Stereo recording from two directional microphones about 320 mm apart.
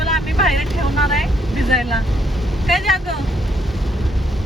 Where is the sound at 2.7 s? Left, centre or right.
Centre.